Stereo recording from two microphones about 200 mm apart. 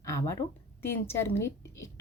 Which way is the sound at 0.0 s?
15° left (ahead or behind).